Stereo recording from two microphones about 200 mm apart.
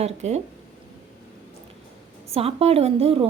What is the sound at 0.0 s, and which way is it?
Speech, 35° right (ahead or behind).